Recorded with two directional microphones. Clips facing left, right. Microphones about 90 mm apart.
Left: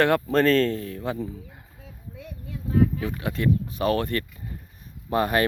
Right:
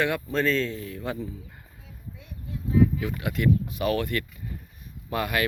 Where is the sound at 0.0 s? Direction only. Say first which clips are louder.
Left 5 dB; 50° left (ahead or behind).